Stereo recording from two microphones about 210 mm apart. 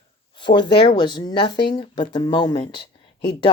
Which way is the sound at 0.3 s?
20° left (ahead or behind).